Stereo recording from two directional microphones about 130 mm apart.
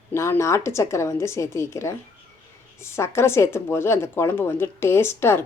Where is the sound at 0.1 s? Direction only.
20° left (ahead or behind).